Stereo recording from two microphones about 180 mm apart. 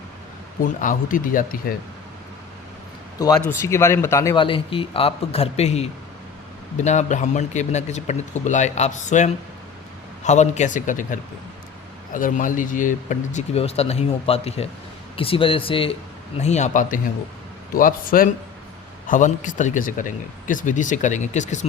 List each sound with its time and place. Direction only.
0.6 s speech: 45° left (ahead or behind)
3.4 s speech: 15° left (ahead or behind)
4.4 s speech: 30° left (ahead or behind)